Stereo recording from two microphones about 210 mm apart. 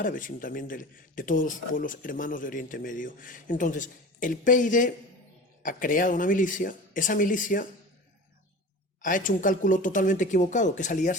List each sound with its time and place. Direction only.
0.0 s speech: 40° left (ahead or behind)
9.0 s speech: 40° left (ahead or behind)